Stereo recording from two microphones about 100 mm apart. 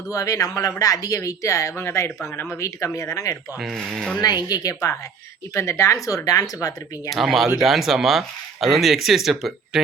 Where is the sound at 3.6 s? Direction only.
Centre (ahead or behind).